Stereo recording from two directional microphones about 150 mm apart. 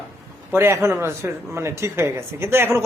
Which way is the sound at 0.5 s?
15° right (ahead or behind).